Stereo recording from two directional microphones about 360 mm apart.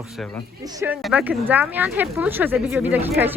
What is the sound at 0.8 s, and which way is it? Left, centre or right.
Speech, centre.